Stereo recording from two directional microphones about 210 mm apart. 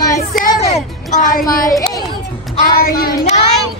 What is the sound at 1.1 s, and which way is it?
Speech, 35° left (ahead or behind).